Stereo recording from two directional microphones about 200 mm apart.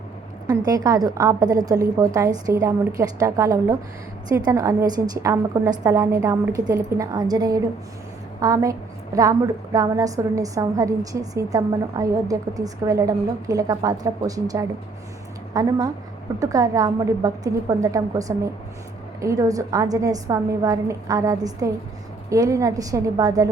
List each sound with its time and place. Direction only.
0.4 s a woman's voice: 20° right (ahead or behind)